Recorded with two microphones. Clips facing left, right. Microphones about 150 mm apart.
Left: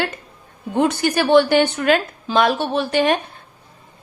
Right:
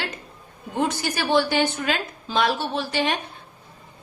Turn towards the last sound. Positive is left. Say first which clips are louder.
# left 7 dB
turn(degrees=50)  # may be behind; listen again after turning